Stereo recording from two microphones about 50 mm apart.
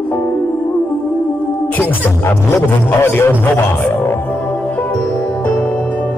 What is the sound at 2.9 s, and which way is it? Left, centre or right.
Speech, left.